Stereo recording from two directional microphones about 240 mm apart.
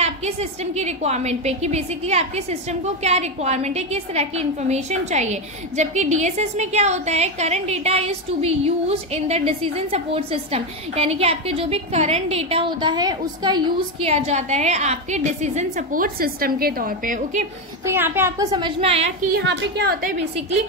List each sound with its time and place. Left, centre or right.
0.0 s a woman's voice: right
17.8 s a woman's voice: centre; by 19.3 s right
19.3 s a woman's voice: right